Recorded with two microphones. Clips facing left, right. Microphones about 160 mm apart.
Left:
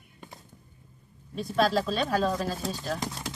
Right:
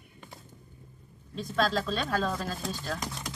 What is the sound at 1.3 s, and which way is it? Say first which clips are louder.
Speech: left 3 dB; 10° left (ahead or behind).